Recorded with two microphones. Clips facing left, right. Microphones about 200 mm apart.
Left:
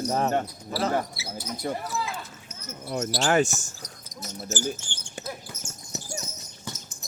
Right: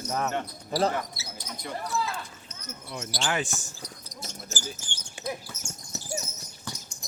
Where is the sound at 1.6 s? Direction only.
40° left (ahead or behind).